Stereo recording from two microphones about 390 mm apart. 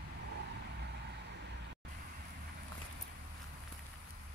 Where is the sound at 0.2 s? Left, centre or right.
Right.